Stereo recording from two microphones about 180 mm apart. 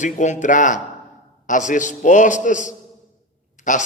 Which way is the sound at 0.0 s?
40° left (ahead or behind).